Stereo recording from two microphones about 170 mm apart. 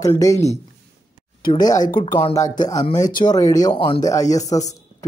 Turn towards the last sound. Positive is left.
turn(degrees=20)  # may be behind; listen again after turning